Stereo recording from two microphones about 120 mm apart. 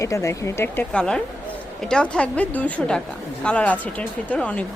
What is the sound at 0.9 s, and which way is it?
A woman's voice, 5° left (ahead or behind).